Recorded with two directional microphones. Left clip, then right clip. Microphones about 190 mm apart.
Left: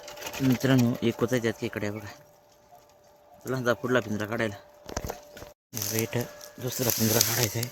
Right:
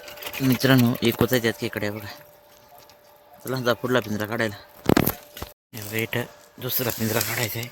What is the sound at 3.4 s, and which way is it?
Speech, 30° right (ahead or behind).